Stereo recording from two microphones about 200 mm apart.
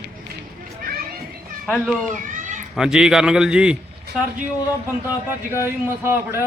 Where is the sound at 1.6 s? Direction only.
Centre (ahead or behind).